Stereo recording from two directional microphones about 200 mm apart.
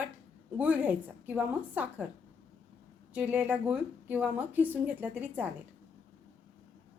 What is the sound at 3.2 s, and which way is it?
Speech, 10° right (ahead or behind).